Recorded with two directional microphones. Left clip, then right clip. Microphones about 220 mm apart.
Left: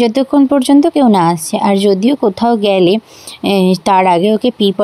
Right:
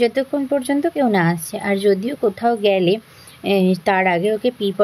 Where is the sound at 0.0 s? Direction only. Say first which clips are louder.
Left 7 dB; 30° left (ahead or behind).